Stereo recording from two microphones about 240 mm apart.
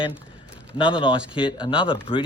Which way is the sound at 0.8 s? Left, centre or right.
Left.